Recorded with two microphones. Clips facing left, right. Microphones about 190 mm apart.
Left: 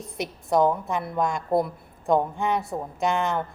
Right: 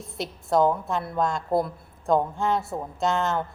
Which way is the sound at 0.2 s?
20° left (ahead or behind).